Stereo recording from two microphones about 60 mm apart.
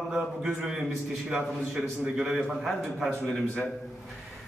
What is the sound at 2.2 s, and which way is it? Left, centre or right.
A man's voice, centre.